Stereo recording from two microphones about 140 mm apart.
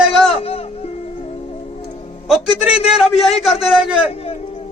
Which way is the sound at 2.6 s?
5° right (ahead or behind).